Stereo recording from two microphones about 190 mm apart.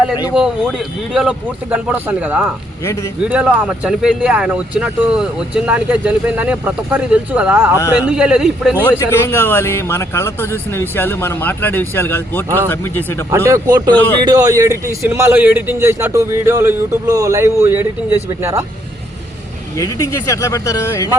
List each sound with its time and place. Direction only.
0.3 s speech: 5° right (ahead or behind)
2.8 s speech: 15° left (ahead or behind)
3.2 s speech: 5° right (ahead or behind)
8.8 s speech: 15° left (ahead or behind)
13.3 s speech: 15° right (ahead or behind)
19.7 s speech: 15° left (ahead or behind)